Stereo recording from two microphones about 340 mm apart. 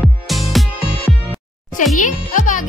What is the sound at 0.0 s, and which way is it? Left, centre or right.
Music, centre.